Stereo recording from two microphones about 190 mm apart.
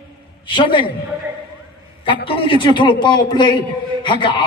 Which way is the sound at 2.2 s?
25° left (ahead or behind).